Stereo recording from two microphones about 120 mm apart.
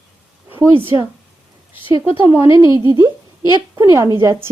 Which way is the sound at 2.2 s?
20° right (ahead or behind).